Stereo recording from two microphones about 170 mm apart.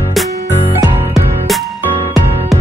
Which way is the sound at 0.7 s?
20° right (ahead or behind).